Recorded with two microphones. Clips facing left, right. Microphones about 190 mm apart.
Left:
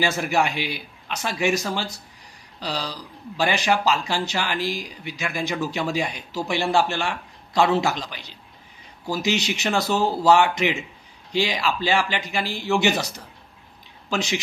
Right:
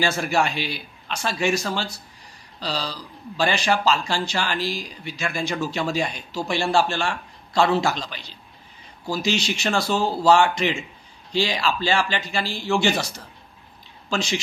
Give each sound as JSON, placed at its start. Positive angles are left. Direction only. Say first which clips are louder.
{"t": 0.0, "sound": "speech", "louder": "even", "side_deg": 15}